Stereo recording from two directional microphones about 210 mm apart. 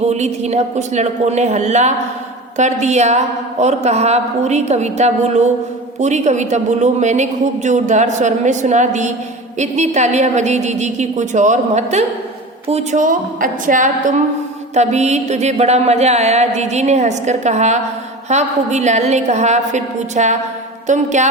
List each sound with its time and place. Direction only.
0.1 s a woman's voice: 30° right (ahead or behind)